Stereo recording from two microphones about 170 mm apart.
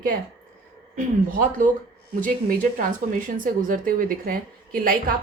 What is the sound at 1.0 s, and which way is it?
A woman's voice, 50° right (ahead or behind).